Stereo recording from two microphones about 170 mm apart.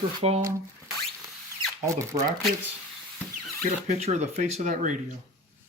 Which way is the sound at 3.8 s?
45° right (ahead or behind).